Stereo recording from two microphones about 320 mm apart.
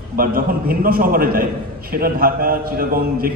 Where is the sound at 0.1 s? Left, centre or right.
Right.